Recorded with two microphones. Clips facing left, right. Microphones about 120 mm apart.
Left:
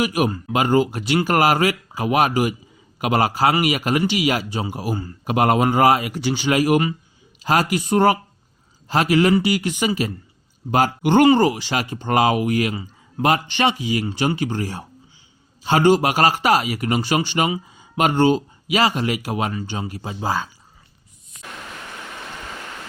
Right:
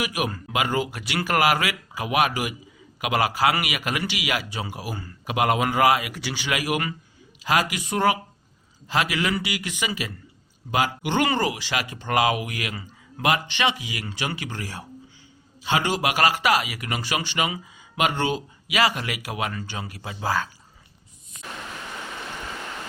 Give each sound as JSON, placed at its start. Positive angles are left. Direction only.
{"t": 0.0, "sound": "a man's voice", "side_deg": 35}
{"t": 15.6, "sound": "speech", "side_deg": 40}
{"t": 19.5, "sound": "speech", "side_deg": 20}